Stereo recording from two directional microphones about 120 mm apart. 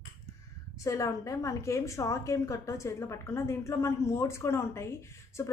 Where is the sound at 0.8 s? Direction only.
25° left (ahead or behind).